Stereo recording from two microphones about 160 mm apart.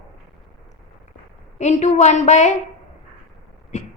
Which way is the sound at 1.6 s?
45° left (ahead or behind).